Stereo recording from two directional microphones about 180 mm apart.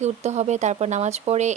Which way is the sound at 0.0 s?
40° right (ahead or behind).